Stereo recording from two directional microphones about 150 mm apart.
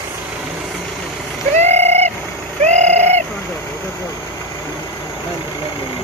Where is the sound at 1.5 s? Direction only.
45° right (ahead or behind).